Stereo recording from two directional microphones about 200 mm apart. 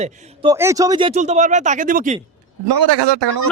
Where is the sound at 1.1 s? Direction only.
35° right (ahead or behind).